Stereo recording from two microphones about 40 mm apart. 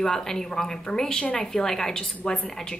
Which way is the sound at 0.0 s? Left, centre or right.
Centre.